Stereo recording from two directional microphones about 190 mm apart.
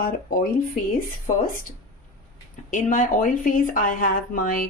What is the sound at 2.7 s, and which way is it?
Speech, 40° left (ahead or behind).